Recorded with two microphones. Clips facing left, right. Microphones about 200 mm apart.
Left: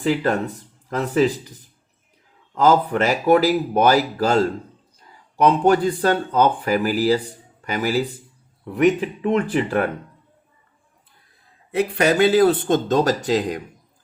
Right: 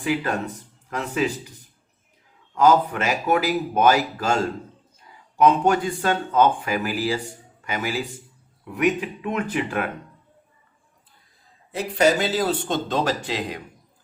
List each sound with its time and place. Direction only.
0.0 s speech: 40° left (ahead or behind)
2.6 s speech: 35° left (ahead or behind)
11.7 s speech: 60° left (ahead or behind); by 13.6 s 40° left (ahead or behind)